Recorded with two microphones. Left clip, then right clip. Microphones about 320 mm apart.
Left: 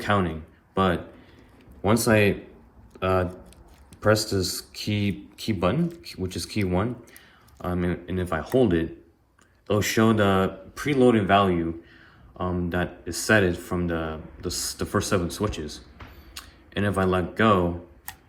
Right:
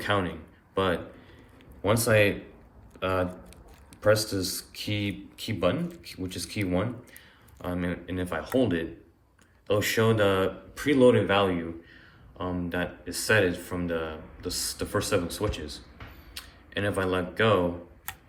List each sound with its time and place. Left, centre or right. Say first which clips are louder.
0.0 s speech: left 3 dB; centre